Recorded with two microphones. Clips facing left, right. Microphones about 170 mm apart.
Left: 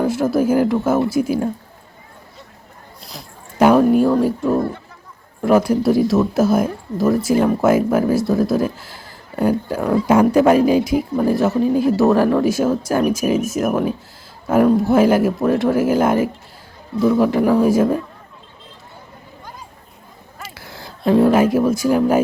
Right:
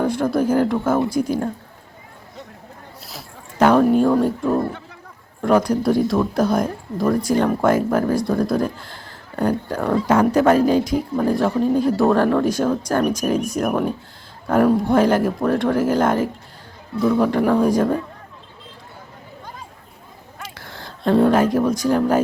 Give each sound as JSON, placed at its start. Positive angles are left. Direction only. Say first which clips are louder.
{"t": 0.0, "sound": "speech", "louder": "left 2 dB", "side_deg": 5}
{"t": 3.6, "sound": "a sound", "louder": "left 2 dB", "side_deg": 10}
{"t": 4.2, "sound": "speech", "louder": "left 2 dB", "side_deg": 0}
{"t": 20.4, "sound": "speech", "louder": "left 1 dB", "side_deg": 10}